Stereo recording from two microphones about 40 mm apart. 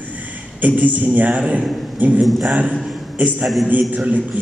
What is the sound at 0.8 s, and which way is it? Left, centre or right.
Speech, right.